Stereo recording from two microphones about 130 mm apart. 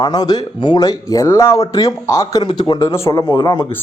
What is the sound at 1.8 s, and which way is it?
Speech, 25° left (ahead or behind).